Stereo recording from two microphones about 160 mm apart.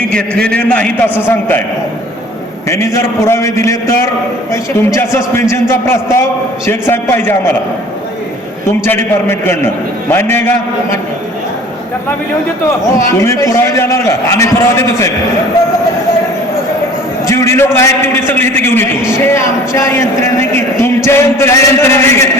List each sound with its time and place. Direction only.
0.5 s a man's voice: 5° left (ahead or behind)
2.6 s a man's voice: 15° left (ahead or behind)
8.8 s a man's voice: 15° left (ahead or behind)
13.1 s a man's voice: 20° left (ahead or behind)
17.2 s a man's voice: 15° left (ahead or behind)